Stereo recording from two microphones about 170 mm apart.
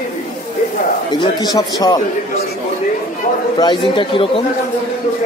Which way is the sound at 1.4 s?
20° left (ahead or behind).